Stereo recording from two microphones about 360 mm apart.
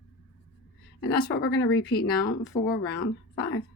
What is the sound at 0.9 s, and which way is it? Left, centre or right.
Speech, left.